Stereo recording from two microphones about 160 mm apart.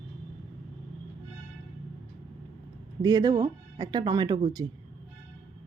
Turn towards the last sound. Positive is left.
turn(degrees=-25)  # may be behind; listen again after turning